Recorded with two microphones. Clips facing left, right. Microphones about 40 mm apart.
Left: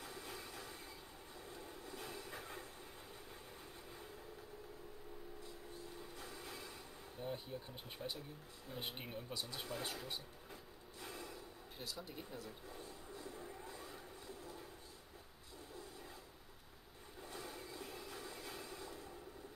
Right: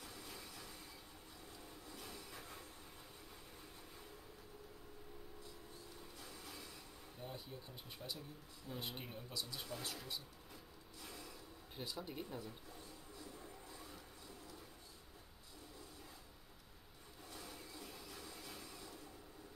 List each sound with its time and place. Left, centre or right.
0.0 s train: left
6.1 s train: left
7.2 s a sound: centre
8.0 s speech: centre; by 11.3 s left
11.8 s speech: centre
12.6 s music: left
13.7 s a sound: left
17.2 s vehicle: left